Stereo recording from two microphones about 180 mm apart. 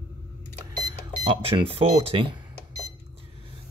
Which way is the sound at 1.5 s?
30° right (ahead or behind).